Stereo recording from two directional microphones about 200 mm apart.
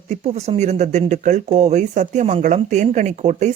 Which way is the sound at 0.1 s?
35° right (ahead or behind).